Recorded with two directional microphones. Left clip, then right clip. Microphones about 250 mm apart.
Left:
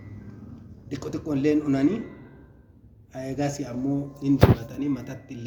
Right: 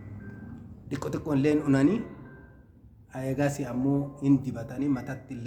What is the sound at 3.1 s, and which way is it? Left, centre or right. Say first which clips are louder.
Speech: even; right.